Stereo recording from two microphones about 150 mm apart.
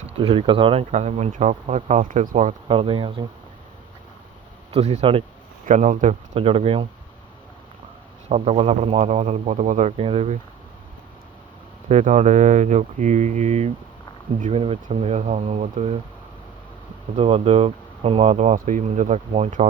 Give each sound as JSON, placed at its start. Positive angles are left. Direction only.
{"t": 0.2, "sound": "speech", "side_deg": -35}
{"t": 2.6, "sound": "speech", "side_deg": -35}
{"t": 4.7, "sound": "speech", "side_deg": -45}
{"t": 5.6, "sound": "speech", "side_deg": -60}
{"t": 8.3, "sound": "speech", "side_deg": -45}
{"t": 10.0, "sound": "speech", "side_deg": -40}
{"t": 11.9, "sound": "speech", "side_deg": -50}
{"t": 17.2, "sound": "speech", "side_deg": -40}
{"t": 18.3, "sound": "speech", "side_deg": -55}